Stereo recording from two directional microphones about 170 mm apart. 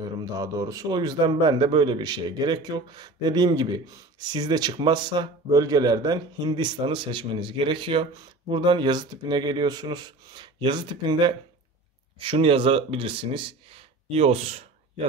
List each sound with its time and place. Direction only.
0.2 s a man's voice: 20° right (ahead or behind)